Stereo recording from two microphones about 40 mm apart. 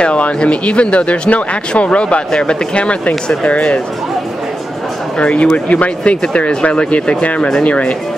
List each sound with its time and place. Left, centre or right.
0.0 s speech: left
5.2 s speech: left